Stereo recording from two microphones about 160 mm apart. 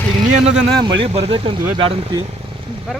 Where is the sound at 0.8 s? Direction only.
30° right (ahead or behind).